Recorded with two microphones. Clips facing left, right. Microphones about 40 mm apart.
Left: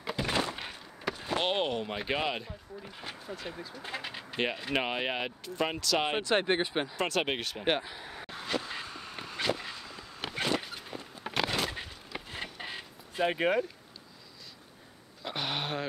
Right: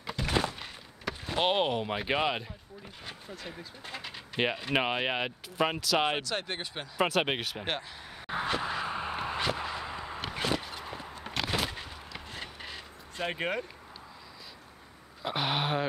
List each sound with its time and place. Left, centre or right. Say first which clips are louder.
0.0 s thunk: right 1 dB; centre
1.0 s a sound: left 1 dB; centre
1.4 s speech: right 4 dB; centre
2.8 s speech: even; centre
3.8 s speech: left 3 dB; centre
4.6 s speech: right 2 dB; centre
6.2 s speech: left 7 dB; left
7.0 s speech: right 6 dB; centre
7.6 s speech: left 5 dB; centre
8.3 s a sound: right 5 dB; right
10.2 s vehicle: left 1 dB; centre
11.1 s a sound: left 1 dB; centre
13.2 s speech: left 5 dB; centre
15.2 s speech: right 4 dB; centre